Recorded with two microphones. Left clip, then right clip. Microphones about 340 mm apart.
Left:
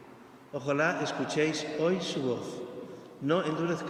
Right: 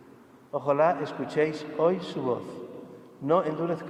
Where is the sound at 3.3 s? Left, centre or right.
Centre.